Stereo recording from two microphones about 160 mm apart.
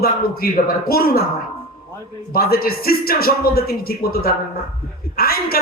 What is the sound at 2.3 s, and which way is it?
A man's voice, 70° left (ahead or behind).